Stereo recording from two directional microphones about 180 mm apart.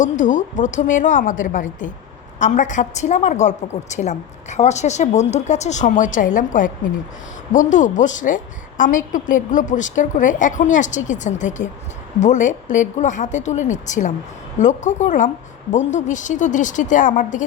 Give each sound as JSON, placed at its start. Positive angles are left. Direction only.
{"t": 0.0, "sound": "a woman's voice", "side_deg": 45}